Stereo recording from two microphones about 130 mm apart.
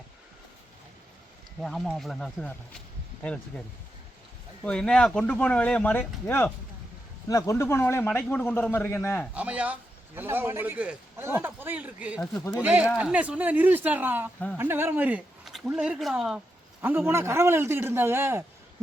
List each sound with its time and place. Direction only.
1.6 s a man's voice: centre (ahead or behind)
4.6 s a man's voice: 10° left (ahead or behind)
9.3 s speech: 10° right (ahead or behind)
17.1 s speech: 20° right (ahead or behind)